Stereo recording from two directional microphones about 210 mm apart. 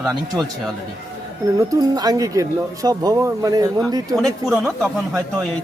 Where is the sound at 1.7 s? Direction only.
20° right (ahead or behind).